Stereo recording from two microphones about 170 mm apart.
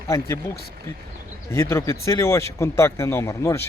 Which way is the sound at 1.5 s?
15° left (ahead or behind).